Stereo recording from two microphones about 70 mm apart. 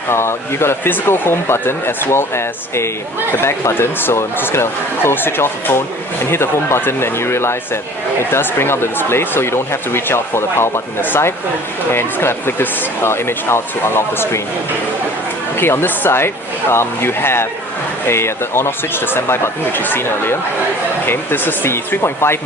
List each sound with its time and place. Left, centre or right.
0.1 s speech: left
15.5 s speech: left